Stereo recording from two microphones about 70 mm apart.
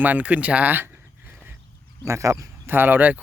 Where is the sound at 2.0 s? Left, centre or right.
Right.